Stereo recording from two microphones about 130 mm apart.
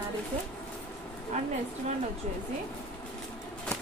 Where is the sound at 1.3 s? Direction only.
65° right (ahead or behind).